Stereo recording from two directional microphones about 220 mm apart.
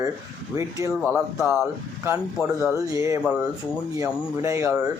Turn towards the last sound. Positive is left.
turn(degrees=-15)  # may be behind; listen again after turning